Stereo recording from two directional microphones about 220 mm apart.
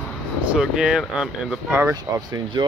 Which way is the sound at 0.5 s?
5° right (ahead or behind).